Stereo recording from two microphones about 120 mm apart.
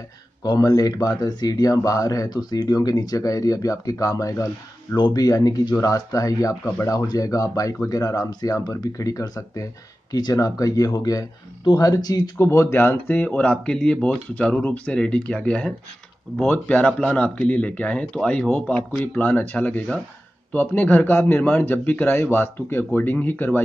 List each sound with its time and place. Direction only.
0.4 s speech: 30° left (ahead or behind); by 23.6 s 15° left (ahead or behind)